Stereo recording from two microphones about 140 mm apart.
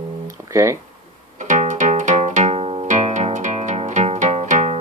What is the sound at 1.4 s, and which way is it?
Music, 65° right (ahead or behind).